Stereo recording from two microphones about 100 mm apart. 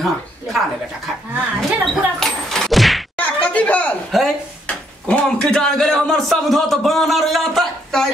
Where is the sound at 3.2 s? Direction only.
15° left (ahead or behind).